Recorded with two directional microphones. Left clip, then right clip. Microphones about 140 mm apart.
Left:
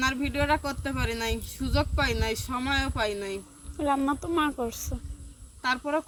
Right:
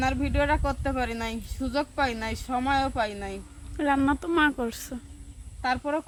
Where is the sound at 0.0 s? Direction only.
5° right (ahead or behind).